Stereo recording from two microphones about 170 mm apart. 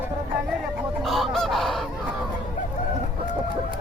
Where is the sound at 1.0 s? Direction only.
Centre (ahead or behind).